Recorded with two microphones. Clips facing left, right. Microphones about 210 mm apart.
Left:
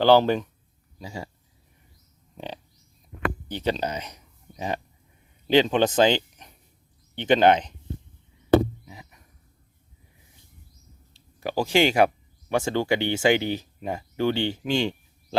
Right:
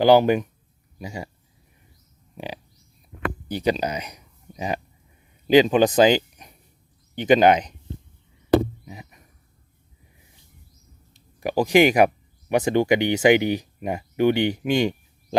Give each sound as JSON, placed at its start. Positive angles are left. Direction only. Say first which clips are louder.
{"t": 0.0, "sound": "speech", "louder": "right 2 dB", "side_deg": -15}
{"t": 3.5, "sound": "speech", "louder": "right 5 dB", "side_deg": -10}
{"t": 8.9, "sound": "a sound", "louder": "right 5 dB", "side_deg": -20}
{"t": 11.3, "sound": "speech", "louder": "right 5 dB", "side_deg": -15}